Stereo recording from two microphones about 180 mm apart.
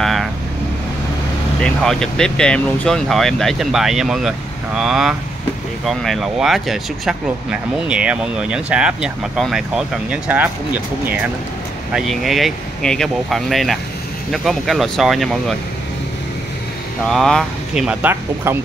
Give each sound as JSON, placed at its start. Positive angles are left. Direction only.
{"t": 0.0, "sound": "vehicle", "side_deg": 0}
{"t": 1.6, "sound": "speech", "side_deg": 5}
{"t": 17.0, "sound": "speech", "side_deg": 5}